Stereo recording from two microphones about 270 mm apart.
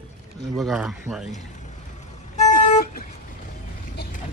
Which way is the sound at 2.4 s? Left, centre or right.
Left.